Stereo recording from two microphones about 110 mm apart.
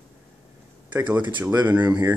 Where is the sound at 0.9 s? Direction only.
15° right (ahead or behind).